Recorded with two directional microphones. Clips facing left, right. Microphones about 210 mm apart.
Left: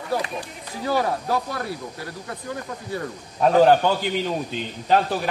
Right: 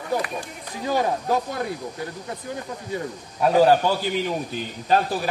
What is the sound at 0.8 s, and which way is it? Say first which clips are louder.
Speech: even; 20° right (ahead or behind).